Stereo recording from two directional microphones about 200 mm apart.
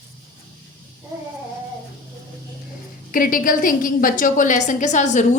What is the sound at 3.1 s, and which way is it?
A woman's voice, 45° left (ahead or behind).